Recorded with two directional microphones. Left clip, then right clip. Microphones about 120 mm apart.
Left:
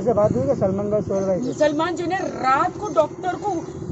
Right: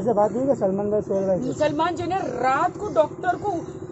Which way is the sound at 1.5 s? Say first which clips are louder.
Left 2 dB; 25° right (ahead or behind).